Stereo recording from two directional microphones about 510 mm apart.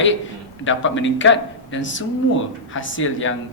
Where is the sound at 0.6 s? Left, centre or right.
Left.